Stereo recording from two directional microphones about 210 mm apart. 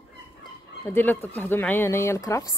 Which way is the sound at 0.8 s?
10° left (ahead or behind).